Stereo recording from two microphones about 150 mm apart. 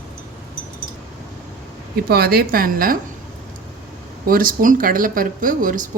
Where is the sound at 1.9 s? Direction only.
90° right; by 2.9 s 75° right (ahead or behind).